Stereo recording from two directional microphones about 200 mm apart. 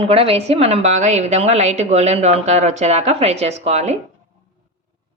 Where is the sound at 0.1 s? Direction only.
30° right (ahead or behind).